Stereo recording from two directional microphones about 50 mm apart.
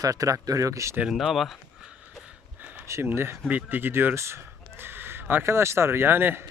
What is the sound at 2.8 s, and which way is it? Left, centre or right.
Speech, right.